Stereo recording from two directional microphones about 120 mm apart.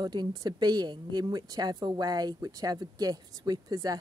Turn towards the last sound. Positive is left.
turn(degrees=-30)  # may be behind; listen again after turning